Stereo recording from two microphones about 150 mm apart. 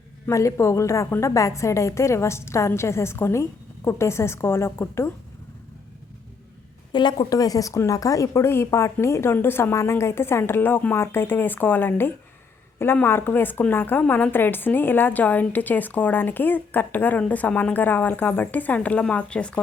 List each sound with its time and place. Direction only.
0.3 s a woman's voice: 20° left (ahead or behind)
6.9 s a woman's voice: 30° left (ahead or behind); by 19.6 s 5° left (ahead or behind)